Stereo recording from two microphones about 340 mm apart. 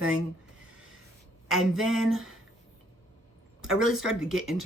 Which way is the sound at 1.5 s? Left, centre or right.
Centre.